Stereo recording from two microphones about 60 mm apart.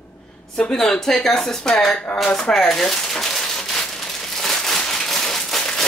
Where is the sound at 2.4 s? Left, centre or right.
Centre.